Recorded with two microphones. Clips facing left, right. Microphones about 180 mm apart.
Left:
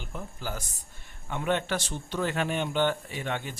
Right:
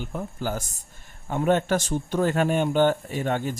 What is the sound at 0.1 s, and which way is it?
Speech, 55° right (ahead or behind).